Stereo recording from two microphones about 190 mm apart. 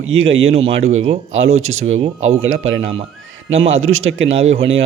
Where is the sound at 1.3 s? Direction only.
90° right.